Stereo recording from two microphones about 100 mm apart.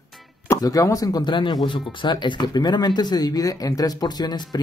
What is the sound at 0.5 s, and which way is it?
Speech, 35° left (ahead or behind).